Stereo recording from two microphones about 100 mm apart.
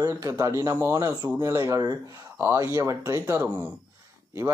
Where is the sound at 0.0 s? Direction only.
35° right (ahead or behind).